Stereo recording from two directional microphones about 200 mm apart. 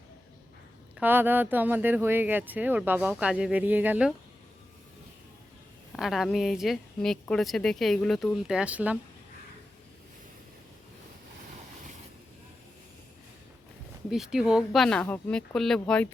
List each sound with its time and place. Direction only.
0.9 s speech: 10° right (ahead or behind)
5.9 s a woman's voice: centre (ahead or behind)
14.1 s a woman's voice: 5° right (ahead or behind)